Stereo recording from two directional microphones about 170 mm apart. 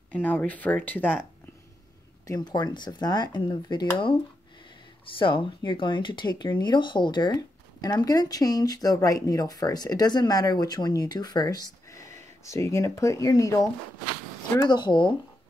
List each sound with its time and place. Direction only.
0.1 s speech: 10° left (ahead or behind)
2.2 s speech: 25° left (ahead or behind)
14.7 s speech: 25° left (ahead or behind)